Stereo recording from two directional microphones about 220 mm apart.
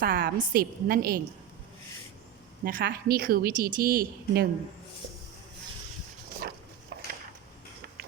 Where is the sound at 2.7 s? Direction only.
40° right (ahead or behind).